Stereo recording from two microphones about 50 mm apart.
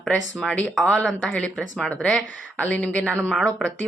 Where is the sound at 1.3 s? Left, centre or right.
Left.